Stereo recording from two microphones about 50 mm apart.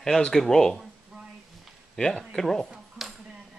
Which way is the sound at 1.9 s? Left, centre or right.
Centre.